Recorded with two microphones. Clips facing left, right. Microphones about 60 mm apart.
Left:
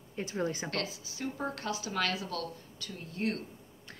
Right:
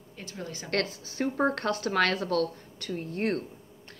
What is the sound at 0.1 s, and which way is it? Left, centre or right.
Speech, left.